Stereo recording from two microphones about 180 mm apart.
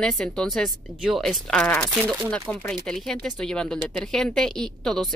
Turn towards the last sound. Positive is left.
turn(degrees=0)  # may be behind; listen again after turning